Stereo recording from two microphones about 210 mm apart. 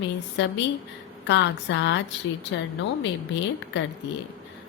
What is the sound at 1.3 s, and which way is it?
Speech, 60° left (ahead or behind).